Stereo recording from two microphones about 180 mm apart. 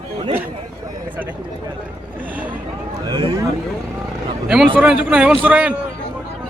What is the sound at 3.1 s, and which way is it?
Speech, 25° right (ahead or behind).